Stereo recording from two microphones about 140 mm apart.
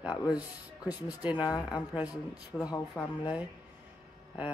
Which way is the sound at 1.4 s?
30° left (ahead or behind).